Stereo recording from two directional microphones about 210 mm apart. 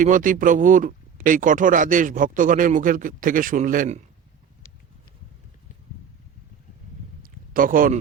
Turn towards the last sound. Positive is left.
turn(degrees=-40)  # may be behind; listen again after turning